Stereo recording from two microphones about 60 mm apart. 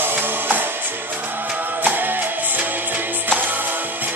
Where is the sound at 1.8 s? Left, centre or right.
Right.